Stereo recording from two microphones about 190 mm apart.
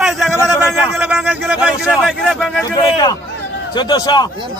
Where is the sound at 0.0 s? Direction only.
Centre (ahead or behind).